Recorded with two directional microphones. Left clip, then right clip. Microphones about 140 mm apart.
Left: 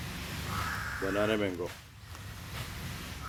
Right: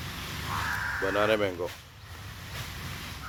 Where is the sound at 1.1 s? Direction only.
25° left (ahead or behind).